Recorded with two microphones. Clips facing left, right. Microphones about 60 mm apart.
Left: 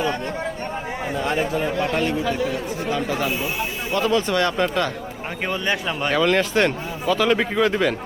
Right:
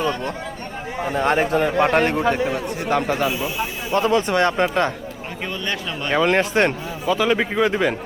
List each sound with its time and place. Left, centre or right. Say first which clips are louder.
1.1 s speech: right 5 dB; right
3.9 s speech: right 2 dB; right
5.5 s speech: left 3 dB; centre
6.1 s speech: right 1 dB; right
7.1 s a man's voice: even; centre